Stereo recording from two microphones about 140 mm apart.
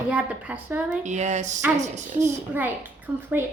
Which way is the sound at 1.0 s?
55° right (ahead or behind).